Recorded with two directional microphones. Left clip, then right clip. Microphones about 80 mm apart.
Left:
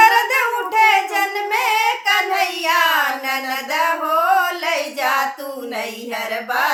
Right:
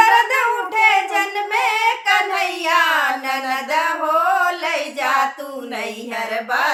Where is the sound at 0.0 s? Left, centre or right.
Left.